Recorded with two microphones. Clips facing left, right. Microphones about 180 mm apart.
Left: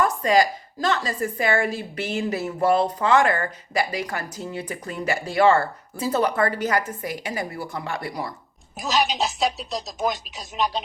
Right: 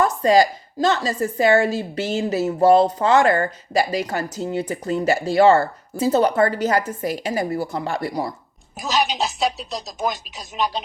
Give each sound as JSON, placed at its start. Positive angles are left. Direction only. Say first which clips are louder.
{"t": 0.0, "sound": "speech", "louder": "right 3 dB", "side_deg": -30}
{"t": 8.9, "sound": "speech", "louder": "right 1 dB", "side_deg": 0}